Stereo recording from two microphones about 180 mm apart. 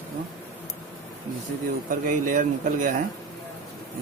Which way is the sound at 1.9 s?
45° right (ahead or behind).